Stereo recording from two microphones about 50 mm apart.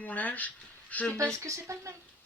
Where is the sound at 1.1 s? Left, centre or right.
Right.